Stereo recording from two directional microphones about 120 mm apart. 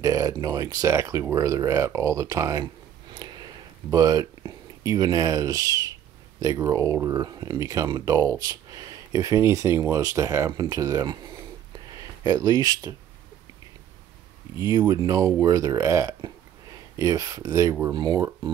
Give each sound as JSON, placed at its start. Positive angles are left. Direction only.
{"t": 0.0, "sound": "speech", "side_deg": -25}
{"t": 2.6, "sound": "a sound", "side_deg": -40}
{"t": 6.4, "sound": "speech", "side_deg": -30}
{"t": 12.3, "sound": "speech", "side_deg": -30}
{"t": 14.6, "sound": "speech", "side_deg": -35}
{"t": 17.9, "sound": "speech", "side_deg": -35}